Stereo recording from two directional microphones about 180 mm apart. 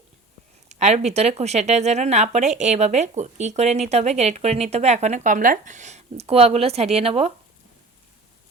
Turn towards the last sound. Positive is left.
turn(degrees=-35)  # may be behind; listen again after turning